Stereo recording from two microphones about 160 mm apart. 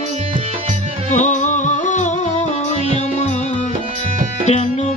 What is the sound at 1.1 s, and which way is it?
Music, 50° left (ahead or behind).